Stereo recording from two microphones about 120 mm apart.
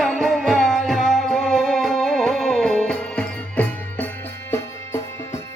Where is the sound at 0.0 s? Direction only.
5° left (ahead or behind).